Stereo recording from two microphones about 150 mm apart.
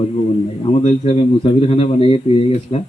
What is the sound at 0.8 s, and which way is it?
Speech, 45° left (ahead or behind).